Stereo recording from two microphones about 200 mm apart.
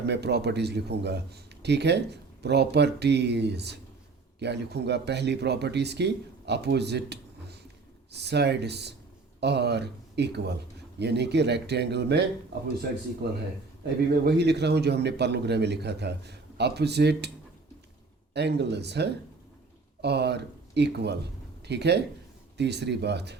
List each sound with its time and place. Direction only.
0.0 s a man's voice: 55° right (ahead or behind)
13.8 s a man's voice: 55° right (ahead or behind)
18.3 s a man's voice: 55° right (ahead or behind)